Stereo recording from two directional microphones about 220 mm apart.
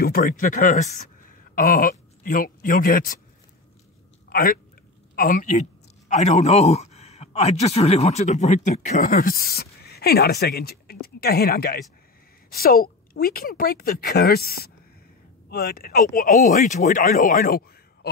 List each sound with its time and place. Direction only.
0.0 s speech: 40° left (ahead or behind)
4.3 s a woman's voice: 40° left (ahead or behind)